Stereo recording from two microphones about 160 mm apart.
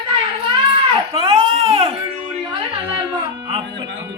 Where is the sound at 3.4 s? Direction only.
35° right (ahead or behind).